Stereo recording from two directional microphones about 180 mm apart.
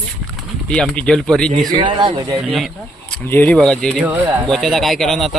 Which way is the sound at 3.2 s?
10° left (ahead or behind).